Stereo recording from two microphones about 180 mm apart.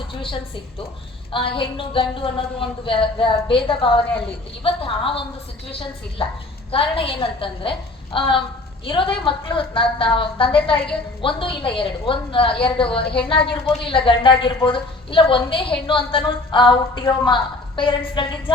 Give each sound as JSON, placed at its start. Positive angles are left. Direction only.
{"t": 0.1, "sound": "a woman's voice", "side_deg": 30}
{"t": 6.7, "sound": "a woman's voice", "side_deg": 30}